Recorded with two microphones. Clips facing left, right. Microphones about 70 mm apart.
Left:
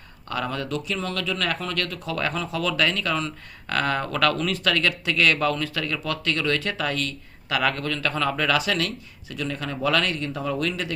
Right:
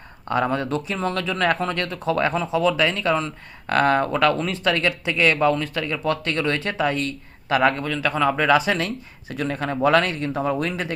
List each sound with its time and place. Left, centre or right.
0.3 s speech: right
7.8 s speech: centre; by 10.9 s right